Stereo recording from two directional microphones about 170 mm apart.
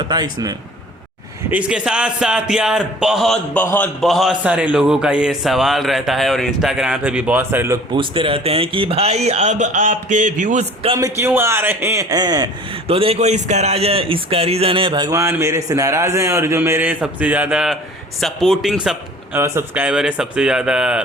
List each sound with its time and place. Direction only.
0.1 s speech: 25° right (ahead or behind)
1.5 s a man's voice: 10° right (ahead or behind)
3.6 s a man's voice: 10° left (ahead or behind)
4.0 s a man's voice: centre (ahead or behind)
7.9 s a man's voice: 30° right (ahead or behind)
11.0 s speech: 15° right (ahead or behind)
12.9 s a man's voice: 35° right (ahead or behind); by 21.0 s 5° right (ahead or behind)